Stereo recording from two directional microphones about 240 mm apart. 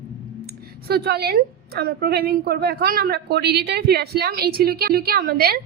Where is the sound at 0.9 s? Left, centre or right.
Right.